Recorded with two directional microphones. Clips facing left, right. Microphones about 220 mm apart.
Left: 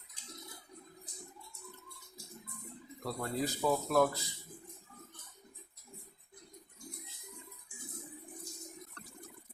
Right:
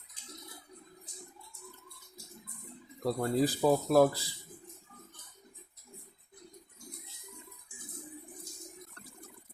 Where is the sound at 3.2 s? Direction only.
35° right (ahead or behind).